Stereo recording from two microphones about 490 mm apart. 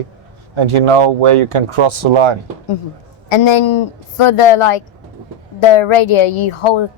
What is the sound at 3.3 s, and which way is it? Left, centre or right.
Speech, left.